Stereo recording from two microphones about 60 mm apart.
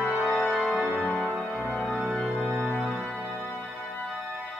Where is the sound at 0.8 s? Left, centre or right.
Centre.